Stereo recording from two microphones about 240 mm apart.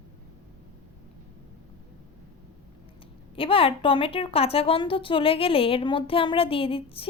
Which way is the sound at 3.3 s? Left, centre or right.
Left.